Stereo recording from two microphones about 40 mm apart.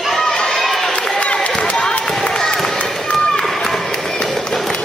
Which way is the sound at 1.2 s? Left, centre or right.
Left.